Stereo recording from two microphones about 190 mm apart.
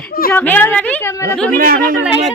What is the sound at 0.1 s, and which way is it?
Speech, 50° left (ahead or behind).